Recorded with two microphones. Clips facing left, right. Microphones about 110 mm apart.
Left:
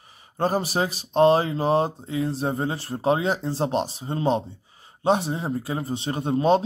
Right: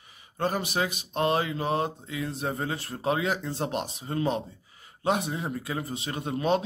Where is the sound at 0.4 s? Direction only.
35° left (ahead or behind).